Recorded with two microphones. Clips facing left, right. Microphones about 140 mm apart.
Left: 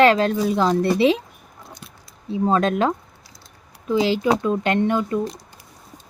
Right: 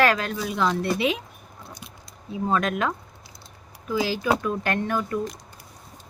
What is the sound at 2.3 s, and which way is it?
Speech, 30° left (ahead or behind).